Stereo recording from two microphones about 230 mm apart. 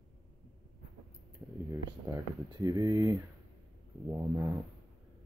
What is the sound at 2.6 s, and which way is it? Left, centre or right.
Speech, centre.